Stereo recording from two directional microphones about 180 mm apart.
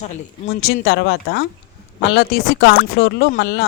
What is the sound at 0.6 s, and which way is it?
Speech, 60° left (ahead or behind).